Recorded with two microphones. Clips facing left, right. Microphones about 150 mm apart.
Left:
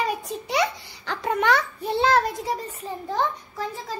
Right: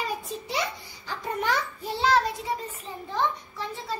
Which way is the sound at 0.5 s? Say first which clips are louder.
Left 7 dB; 75° left (ahead or behind).